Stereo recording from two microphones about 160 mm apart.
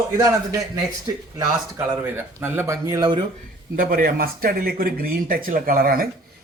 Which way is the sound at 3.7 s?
60° right (ahead or behind).